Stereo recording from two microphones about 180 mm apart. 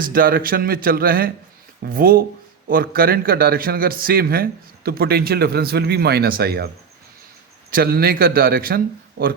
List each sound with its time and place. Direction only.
0.0 s a man's voice: 55° right (ahead or behind)
7.7 s a man's voice: 55° right (ahead or behind)